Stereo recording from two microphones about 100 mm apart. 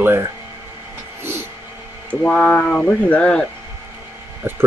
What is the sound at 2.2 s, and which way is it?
Speech, 15° left (ahead or behind).